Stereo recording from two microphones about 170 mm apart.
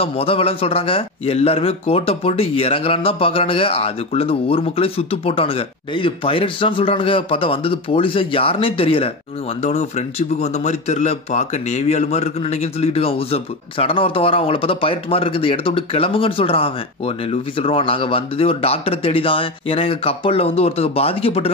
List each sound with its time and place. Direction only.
0.0 s a man's voice: 35° left (ahead or behind)